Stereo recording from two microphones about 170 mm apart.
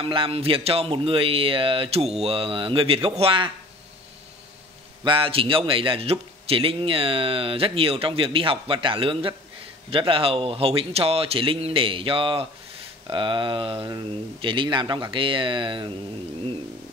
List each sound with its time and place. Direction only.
0.0 s a man's voice: 30° right (ahead or behind)
5.0 s a man's voice: 30° right (ahead or behind)